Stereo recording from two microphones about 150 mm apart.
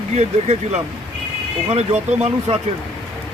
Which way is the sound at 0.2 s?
50° right (ahead or behind).